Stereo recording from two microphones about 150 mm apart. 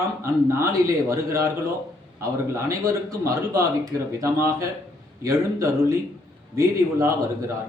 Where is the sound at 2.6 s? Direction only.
20° right (ahead or behind).